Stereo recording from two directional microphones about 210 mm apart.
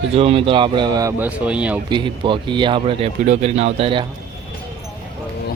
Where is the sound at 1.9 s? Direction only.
25° right (ahead or behind).